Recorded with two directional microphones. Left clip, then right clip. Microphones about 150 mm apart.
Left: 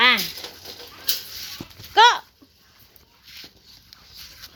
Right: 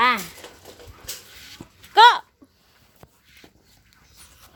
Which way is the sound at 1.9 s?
15° right (ahead or behind).